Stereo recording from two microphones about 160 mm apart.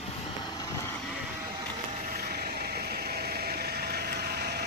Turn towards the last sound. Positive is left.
turn(degrees=-75)  # may be behind; listen again after turning